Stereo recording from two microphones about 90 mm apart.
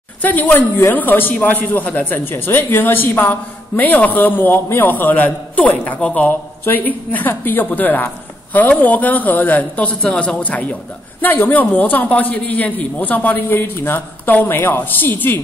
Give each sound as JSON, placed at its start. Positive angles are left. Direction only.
{"t": 0.2, "sound": "a man's voice", "side_deg": 20}